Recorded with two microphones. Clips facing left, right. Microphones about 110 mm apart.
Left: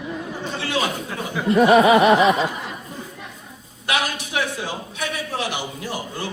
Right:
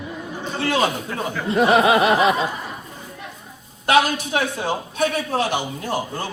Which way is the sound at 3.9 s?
40° right (ahead or behind).